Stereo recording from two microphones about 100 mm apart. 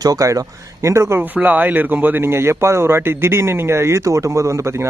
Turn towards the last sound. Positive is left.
turn(degrees=-30)  # may be behind; listen again after turning